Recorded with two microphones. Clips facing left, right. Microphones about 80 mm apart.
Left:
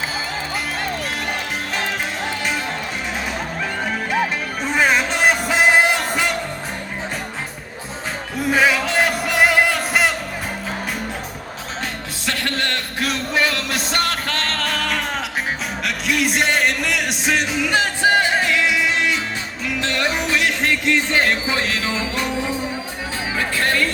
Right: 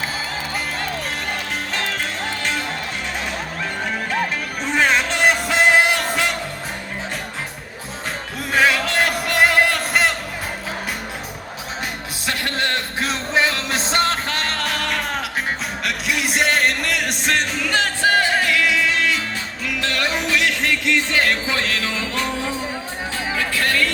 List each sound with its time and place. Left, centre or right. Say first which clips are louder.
4.1 s music: left 2 dB; centre
8.4 s music: left 1 dB; centre
12.2 s music: even; centre
23.4 s music: left 1 dB; left